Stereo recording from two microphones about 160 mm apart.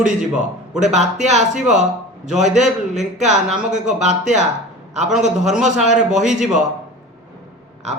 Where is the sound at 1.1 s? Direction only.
45° right (ahead or behind).